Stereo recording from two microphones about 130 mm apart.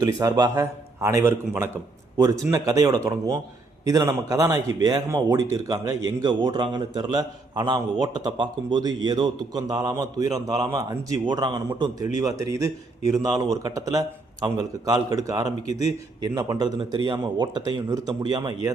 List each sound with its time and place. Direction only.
0.2 s a man's voice: 30° right (ahead or behind)
15.6 s a man's voice: 60° left (ahead or behind)
16.4 s a man's voice: 30° right (ahead or behind)